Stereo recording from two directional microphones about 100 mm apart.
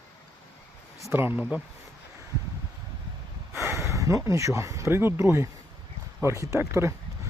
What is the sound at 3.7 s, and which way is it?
Speech, 30° right (ahead or behind).